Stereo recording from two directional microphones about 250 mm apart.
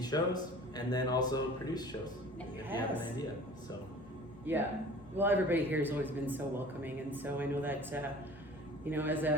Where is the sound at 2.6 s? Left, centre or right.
Centre.